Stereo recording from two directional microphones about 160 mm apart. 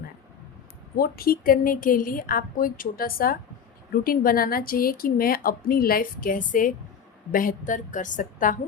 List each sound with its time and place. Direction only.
0.9 s a woman's voice: 70° left (ahead or behind); by 8.5 s 55° left (ahead or behind)